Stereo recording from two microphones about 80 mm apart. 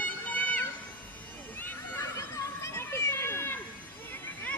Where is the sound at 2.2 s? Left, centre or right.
Left.